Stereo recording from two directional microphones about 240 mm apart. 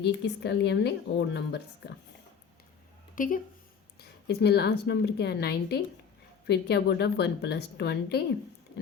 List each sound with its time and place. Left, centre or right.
0.0 s a woman's voice: left
3.2 s a woman's voice: left